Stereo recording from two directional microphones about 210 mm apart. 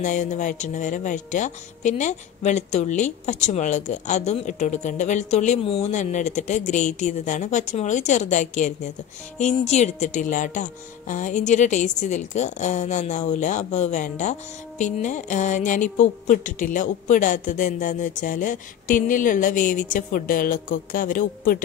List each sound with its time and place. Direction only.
0.0 s speech: 35° left (ahead or behind)